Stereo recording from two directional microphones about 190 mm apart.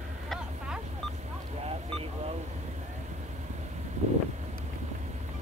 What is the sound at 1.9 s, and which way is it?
Speech, 30° right (ahead or behind).